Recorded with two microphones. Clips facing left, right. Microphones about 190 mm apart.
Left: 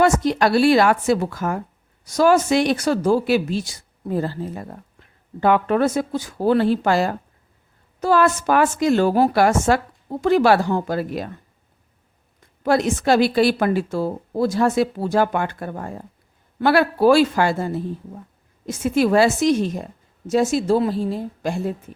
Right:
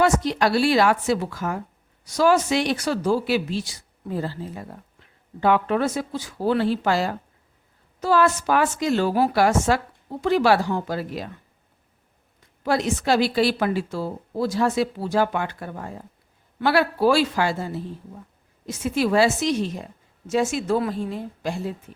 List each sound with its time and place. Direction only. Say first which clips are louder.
0.0 s a woman's voice: left 3 dB; 50° left (ahead or behind)
12.6 s a woman's voice: left 4 dB; 50° left (ahead or behind)